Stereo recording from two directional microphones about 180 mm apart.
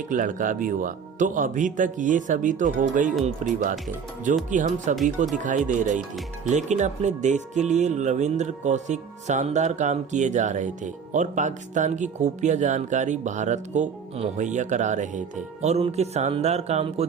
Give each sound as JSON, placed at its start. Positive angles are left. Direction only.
{"t": 0.1, "sound": "speech", "side_deg": -45}